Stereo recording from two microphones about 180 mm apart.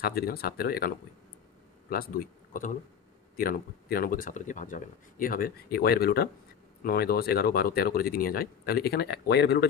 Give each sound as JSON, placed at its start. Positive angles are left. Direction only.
{"t": 0.0, "sound": "speech", "side_deg": 60}